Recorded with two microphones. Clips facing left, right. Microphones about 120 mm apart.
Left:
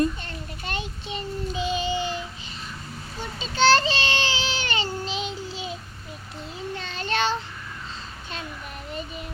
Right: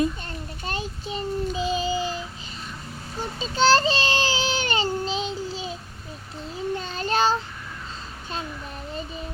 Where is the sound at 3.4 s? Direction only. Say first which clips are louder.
Even; 40° right (ahead or behind).